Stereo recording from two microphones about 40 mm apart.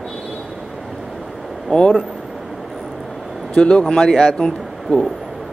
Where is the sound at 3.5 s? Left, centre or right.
Left.